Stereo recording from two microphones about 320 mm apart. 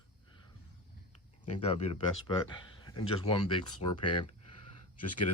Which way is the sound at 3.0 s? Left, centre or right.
Centre.